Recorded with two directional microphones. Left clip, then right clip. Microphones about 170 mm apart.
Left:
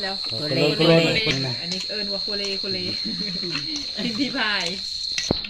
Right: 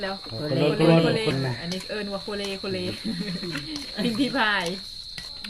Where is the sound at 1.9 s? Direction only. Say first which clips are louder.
Left 4 dB; 45° right (ahead or behind).